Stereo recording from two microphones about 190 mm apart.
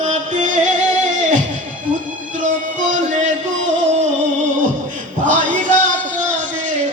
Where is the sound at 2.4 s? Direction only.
40° right (ahead or behind).